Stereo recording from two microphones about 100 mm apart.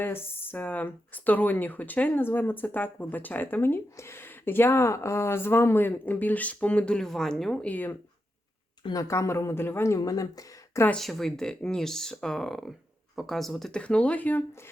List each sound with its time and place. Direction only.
0.0 s speech: 20° left (ahead or behind)
8.9 s speech: 35° left (ahead or behind)
10.0 s speech: 35° left (ahead or behind)
10.9 s speech: 5° left (ahead or behind)